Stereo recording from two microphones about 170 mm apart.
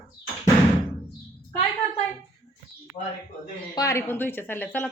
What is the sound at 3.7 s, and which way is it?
A woman's voice, 20° left (ahead or behind).